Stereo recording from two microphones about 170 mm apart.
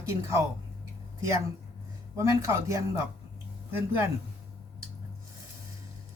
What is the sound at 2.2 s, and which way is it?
Speech, 15° right (ahead or behind).